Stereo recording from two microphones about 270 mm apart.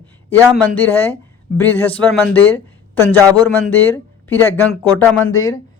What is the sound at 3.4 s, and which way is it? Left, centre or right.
Speech, centre.